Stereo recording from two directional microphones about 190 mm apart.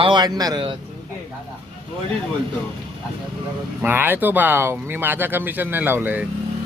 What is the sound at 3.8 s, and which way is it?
Speech, 10° right (ahead or behind).